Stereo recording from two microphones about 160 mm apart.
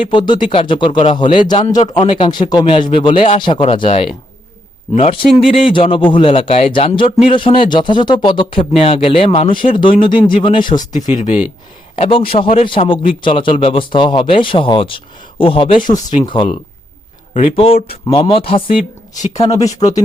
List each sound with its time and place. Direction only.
0.1 s a man's voice: 30° left (ahead or behind)
4.9 s a man's voice: 35° left (ahead or behind)
10.9 s speech: 50° left (ahead or behind)
11.9 s speech: 35° left (ahead or behind)
19.1 s speech: 50° left (ahead or behind)
19.4 s a man's voice: 20° left (ahead or behind)